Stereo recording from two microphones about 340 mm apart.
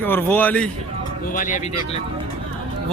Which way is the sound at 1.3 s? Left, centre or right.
Left.